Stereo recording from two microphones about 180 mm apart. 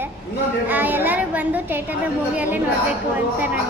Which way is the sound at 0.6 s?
10° right (ahead or behind).